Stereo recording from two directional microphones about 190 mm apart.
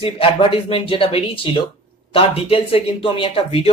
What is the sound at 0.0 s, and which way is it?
Speech, 30° left (ahead or behind).